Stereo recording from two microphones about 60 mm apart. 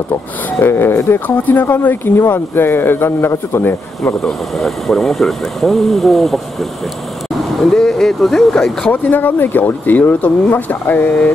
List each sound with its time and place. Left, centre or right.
0.1 s speech: left
1.2 s speech: left
4.2 s speech: centre
8.8 s speech: left